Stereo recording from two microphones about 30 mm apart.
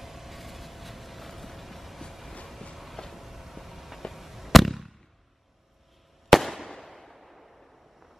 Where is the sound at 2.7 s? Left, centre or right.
Centre.